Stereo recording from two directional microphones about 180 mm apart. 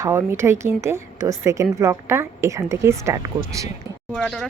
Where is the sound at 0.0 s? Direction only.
15° right (ahead or behind).